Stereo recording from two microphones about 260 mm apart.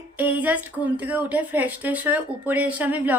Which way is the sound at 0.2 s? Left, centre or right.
Centre.